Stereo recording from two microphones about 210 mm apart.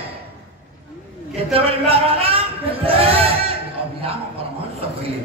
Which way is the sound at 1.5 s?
25° right (ahead or behind).